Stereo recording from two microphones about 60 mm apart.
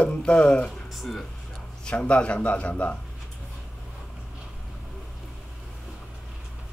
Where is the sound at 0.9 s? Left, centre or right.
Centre.